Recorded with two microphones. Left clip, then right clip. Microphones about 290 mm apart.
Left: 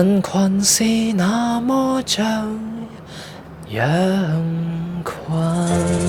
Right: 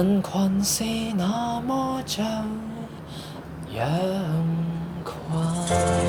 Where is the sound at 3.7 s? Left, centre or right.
Left.